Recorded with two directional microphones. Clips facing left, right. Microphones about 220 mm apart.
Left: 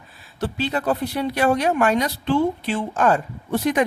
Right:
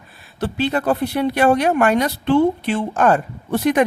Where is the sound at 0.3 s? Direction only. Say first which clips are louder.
Right 4 dB; 60° right (ahead or behind).